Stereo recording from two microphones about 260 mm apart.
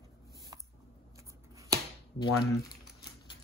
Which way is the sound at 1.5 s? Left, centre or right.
Centre.